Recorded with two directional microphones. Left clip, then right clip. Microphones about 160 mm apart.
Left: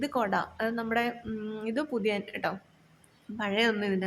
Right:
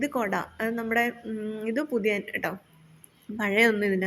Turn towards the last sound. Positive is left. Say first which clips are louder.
# right 5 dB
turn(degrees=-20)  # may be behind; listen again after turning